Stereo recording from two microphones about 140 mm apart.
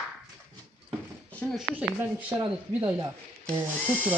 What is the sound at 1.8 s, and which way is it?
Speech, 10° right (ahead or behind).